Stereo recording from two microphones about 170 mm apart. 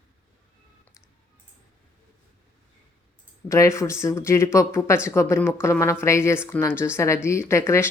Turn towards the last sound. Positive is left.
turn(degrees=15)  # may be behind; listen again after turning